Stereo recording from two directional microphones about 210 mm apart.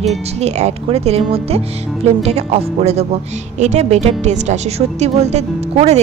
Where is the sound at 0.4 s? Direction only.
30° right (ahead or behind).